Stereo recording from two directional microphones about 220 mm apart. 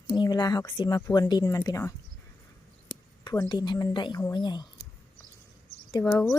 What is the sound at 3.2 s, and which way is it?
Speech, 20° left (ahead or behind).